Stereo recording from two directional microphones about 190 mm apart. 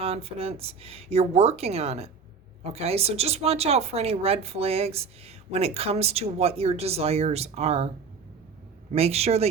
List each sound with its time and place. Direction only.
0.0 s speech: 30° right (ahead or behind)
8.9 s speech: 35° right (ahead or behind)